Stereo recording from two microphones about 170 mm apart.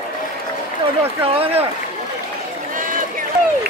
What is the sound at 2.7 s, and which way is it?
Run, 50° right (ahead or behind).